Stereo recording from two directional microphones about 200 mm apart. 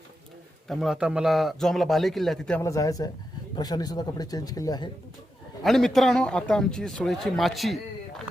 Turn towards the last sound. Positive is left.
turn(degrees=0)  # may be behind; listen again after turning